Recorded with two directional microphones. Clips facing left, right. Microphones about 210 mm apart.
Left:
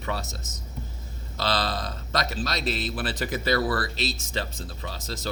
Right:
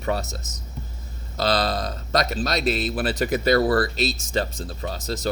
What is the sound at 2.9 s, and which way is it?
Speech, 45° right (ahead or behind).